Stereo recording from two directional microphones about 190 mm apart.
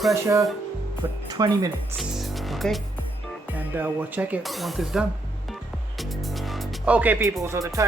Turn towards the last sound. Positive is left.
turn(degrees=-15)  # may be behind; listen again after turning